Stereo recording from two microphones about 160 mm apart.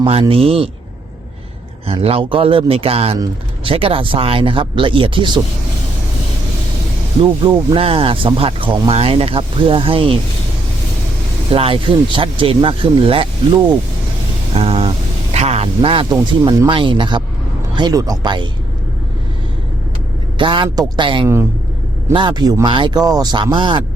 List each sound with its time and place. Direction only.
0.0 s speech: 35° right (ahead or behind)
1.9 s speech: 35° right (ahead or behind)
7.2 s speech: 30° right (ahead or behind)
11.5 s speech: 35° right (ahead or behind)
14.5 s a sound: 35° right (ahead or behind)
15.3 s speech: 40° right (ahead or behind)
16.1 s speech: 20° right (ahead or behind)
20.4 s speech: 30° right (ahead or behind)